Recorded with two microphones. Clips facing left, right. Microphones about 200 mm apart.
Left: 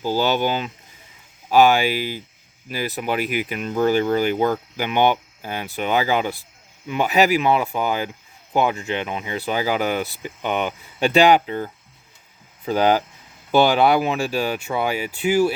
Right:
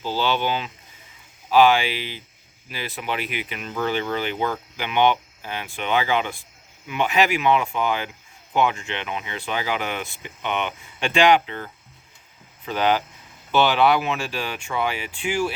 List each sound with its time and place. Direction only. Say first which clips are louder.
0.0 s speech: left 3 dB; 45° left (ahead or behind)
12.6 s speech: left 4 dB; 40° left (ahead or behind)